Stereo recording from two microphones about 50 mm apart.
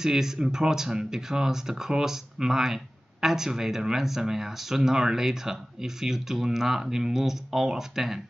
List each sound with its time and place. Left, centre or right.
0.0 s speech: centre